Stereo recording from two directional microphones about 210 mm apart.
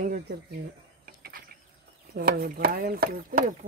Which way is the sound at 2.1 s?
45° right (ahead or behind).